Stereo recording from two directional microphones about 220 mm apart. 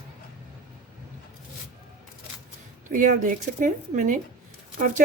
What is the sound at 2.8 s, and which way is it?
A woman's voice, 35° right (ahead or behind).